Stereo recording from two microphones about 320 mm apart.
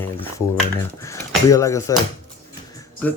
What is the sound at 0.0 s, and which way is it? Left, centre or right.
Speech, centre.